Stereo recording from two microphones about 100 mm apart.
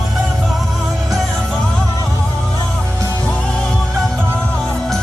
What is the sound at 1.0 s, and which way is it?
Music, centre (ahead or behind).